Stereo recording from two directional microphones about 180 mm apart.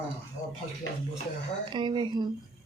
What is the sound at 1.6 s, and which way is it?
Speech, 25° right (ahead or behind).